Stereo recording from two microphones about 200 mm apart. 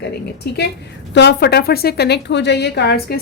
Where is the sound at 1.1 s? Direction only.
60° left (ahead or behind).